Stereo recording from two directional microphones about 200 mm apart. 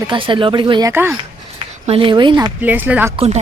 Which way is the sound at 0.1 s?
25° right (ahead or behind).